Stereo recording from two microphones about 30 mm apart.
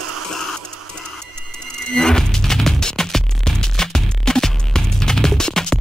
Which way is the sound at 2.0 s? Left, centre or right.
Left.